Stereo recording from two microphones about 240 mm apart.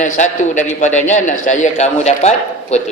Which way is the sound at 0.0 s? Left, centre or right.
Left.